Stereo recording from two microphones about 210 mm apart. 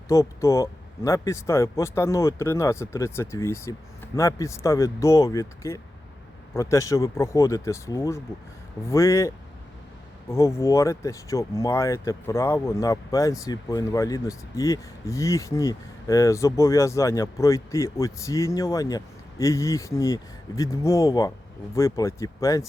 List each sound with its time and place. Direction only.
0.1 s speech: 15° left (ahead or behind)